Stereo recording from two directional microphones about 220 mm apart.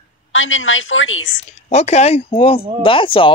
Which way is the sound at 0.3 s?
60° left (ahead or behind).